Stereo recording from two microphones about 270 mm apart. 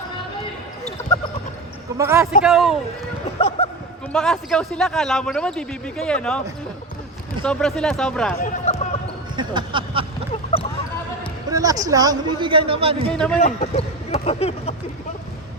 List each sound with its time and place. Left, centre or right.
2.0 s a man's voice: centre
3.6 s a sound: left
4.1 s a man's voice: centre
7.4 s a man's voice: centre
8.4 s run: left
9.3 s a sound: centre
11.5 s speech: centre
13.1 s a man's voice: centre
13.4 s speech: left